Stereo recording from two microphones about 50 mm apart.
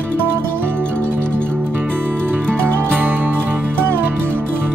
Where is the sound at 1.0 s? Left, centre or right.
Left.